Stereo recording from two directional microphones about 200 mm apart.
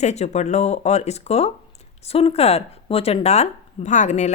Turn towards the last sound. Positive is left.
turn(degrees=35)  # may be behind; listen again after turning